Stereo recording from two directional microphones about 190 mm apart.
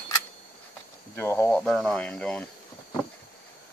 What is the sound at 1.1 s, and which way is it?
Speech, 15° left (ahead or behind).